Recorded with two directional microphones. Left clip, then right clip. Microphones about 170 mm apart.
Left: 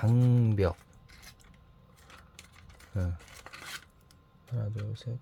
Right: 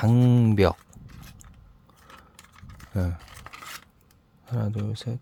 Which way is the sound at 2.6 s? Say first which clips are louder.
Right 8 dB; 25° right (ahead or behind).